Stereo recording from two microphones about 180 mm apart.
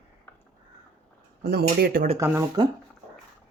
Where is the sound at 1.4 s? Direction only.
60° right (ahead or behind).